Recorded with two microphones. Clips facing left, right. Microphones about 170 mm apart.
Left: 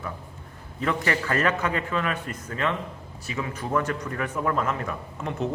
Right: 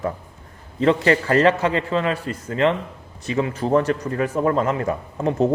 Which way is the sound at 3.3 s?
50° right (ahead or behind).